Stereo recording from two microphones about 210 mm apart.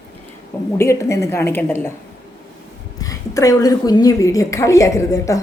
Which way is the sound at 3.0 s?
15° left (ahead or behind).